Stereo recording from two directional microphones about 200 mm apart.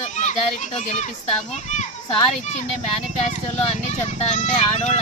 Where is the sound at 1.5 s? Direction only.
35° left (ahead or behind).